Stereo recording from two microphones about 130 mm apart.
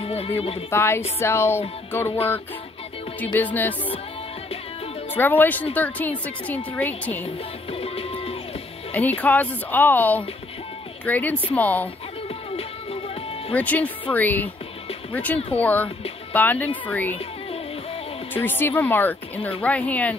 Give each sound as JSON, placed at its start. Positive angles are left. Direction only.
{"t": 0.0, "sound": "music", "side_deg": 50}
{"t": 0.4, "sound": "speech", "side_deg": 50}
{"t": 0.7, "sound": "speech", "side_deg": 20}
{"t": 1.9, "sound": "music", "side_deg": 20}
{"t": 3.3, "sound": "speech", "side_deg": 15}
{"t": 5.1, "sound": "speech", "side_deg": 15}
{"t": 7.7, "sound": "music", "side_deg": 50}
{"t": 8.9, "sound": "speech", "side_deg": 10}
{"t": 13.6, "sound": "speech", "side_deg": 10}
{"t": 18.3, "sound": "speech", "side_deg": 15}